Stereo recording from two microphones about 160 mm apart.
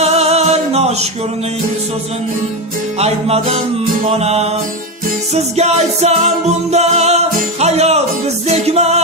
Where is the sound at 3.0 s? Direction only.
40° right (ahead or behind).